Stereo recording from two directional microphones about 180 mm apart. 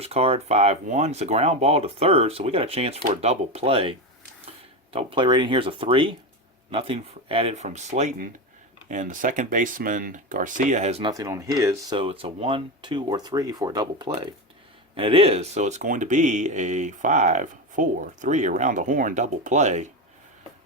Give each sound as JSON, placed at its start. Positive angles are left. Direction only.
{"t": 0.0, "sound": "speech", "side_deg": -35}
{"t": 11.0, "sound": "speech", "side_deg": -20}